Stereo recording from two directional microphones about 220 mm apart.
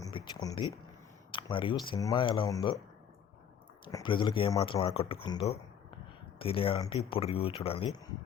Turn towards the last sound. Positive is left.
turn(degrees=25)  # may be behind; listen again after turning